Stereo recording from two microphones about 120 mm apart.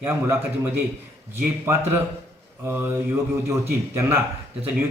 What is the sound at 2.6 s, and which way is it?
Speech, 15° right (ahead or behind).